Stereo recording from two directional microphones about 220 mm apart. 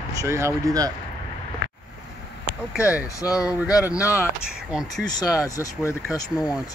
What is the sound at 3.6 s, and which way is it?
Speech, 5° right (ahead or behind).